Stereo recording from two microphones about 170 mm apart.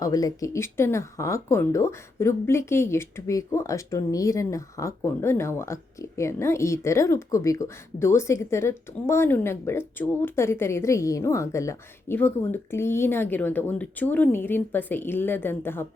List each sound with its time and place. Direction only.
0.0 s speech: 20° left (ahead or behind)